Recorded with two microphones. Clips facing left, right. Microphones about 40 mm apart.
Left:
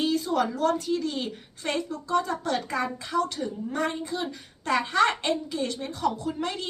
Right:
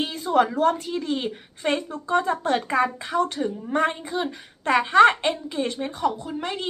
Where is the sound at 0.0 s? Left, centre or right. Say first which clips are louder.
Right 3 dB; right.